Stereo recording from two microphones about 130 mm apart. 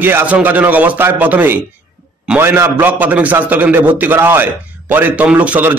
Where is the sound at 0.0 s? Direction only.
15° right (ahead or behind).